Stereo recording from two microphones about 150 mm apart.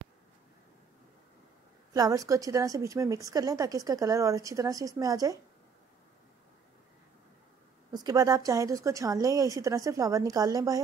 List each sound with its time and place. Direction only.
2.0 s a woman's voice: 25° right (ahead or behind)
7.9 s a woman's voice: 25° right (ahead or behind)